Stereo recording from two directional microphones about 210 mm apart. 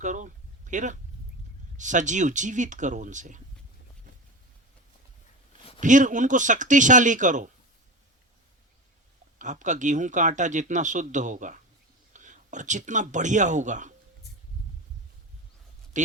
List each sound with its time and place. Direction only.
0.0 s a sound: 35° right (ahead or behind)
1.7 s speech: 35° right (ahead or behind)
5.8 s speech: 35° right (ahead or behind)
9.4 s speech: 35° right (ahead or behind)